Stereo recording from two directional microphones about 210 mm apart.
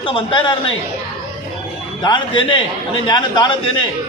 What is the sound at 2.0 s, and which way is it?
A man's voice, 25° left (ahead or behind).